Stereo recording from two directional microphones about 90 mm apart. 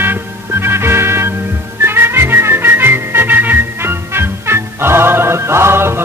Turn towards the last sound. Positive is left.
turn(degrees=-25)  # may be behind; listen again after turning